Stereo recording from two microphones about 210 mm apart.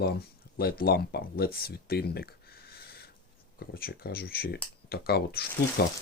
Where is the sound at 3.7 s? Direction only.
45° left (ahead or behind).